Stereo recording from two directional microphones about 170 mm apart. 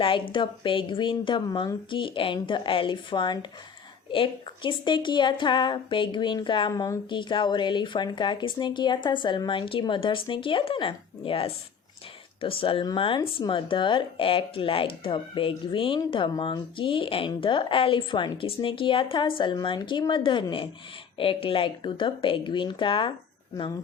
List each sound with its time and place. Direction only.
0.0 s speech: 30° left (ahead or behind)